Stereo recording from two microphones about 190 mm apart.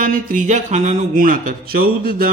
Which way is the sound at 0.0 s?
45° right (ahead or behind).